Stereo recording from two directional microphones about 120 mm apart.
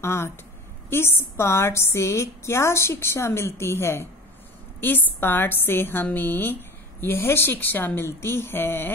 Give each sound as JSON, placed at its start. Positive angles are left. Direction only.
{"t": 0.0, "sound": "a woman's voice", "side_deg": 20}